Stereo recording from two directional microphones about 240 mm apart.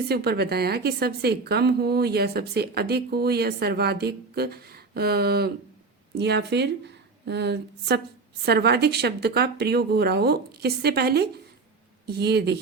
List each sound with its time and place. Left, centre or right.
0.1 s a woman's voice: right